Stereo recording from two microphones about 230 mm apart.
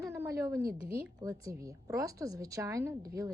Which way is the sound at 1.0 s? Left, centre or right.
Centre.